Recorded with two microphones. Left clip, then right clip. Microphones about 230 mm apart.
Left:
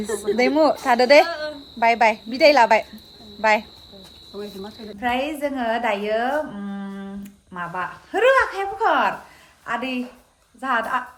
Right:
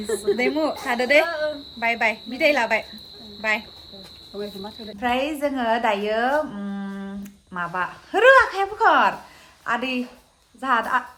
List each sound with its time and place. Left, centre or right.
0.3 s a woman's voice: left
1.3 s a woman's voice: centre
1.8 s a woman's voice: left
4.4 s speech: centre
4.9 s a woman's voice: centre